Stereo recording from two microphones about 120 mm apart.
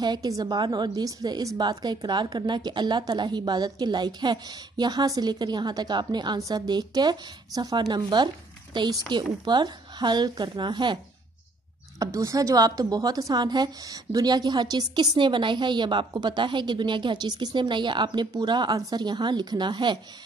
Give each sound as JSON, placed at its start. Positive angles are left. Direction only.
{"t": 0.0, "sound": "a woman's voice", "side_deg": -35}
{"t": 12.0, "sound": "a woman's voice", "side_deg": -25}